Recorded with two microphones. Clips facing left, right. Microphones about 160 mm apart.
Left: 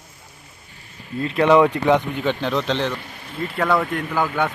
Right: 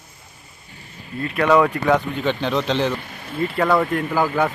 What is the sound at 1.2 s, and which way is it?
Speech, 25° left (ahead or behind).